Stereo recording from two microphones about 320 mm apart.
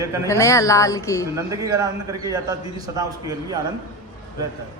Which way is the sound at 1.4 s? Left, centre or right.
Centre.